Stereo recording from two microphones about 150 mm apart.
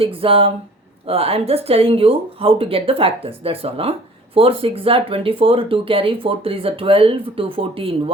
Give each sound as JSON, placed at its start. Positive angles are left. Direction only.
{"t": 0.0, "sound": "speech", "side_deg": -35}